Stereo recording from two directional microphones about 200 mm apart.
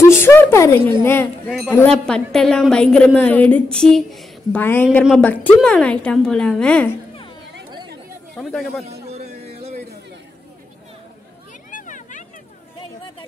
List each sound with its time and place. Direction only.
0.0 s a woman's voice: 10° left (ahead or behind)
8.4 s a woman's voice: centre (ahead or behind)
9.0 s a sound: 35° right (ahead or behind)
11.7 s vehicle: 40° left (ahead or behind)